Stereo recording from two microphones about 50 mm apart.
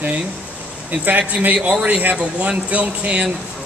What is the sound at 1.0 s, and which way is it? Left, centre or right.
Speech, right.